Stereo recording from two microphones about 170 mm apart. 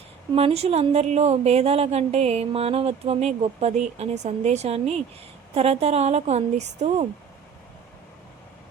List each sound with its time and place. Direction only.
0.3 s a woman's voice: 35° right (ahead or behind)